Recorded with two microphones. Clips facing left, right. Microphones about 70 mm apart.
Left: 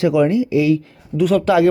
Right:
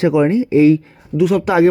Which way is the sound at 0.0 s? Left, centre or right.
Right.